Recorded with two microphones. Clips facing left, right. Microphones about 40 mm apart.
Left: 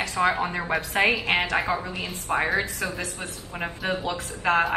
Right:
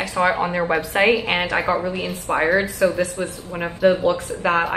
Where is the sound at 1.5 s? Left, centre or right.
Right.